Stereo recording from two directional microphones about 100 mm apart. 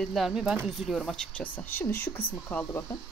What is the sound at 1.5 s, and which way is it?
Speech, 20° left (ahead or behind).